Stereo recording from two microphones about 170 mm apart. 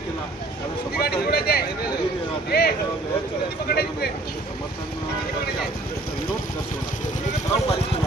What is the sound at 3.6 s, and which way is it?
Speech, 70° left (ahead or behind).